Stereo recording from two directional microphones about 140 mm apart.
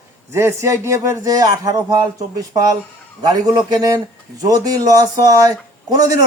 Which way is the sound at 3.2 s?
30° right (ahead or behind).